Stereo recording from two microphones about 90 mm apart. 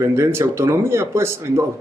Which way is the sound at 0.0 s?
30° right (ahead or behind).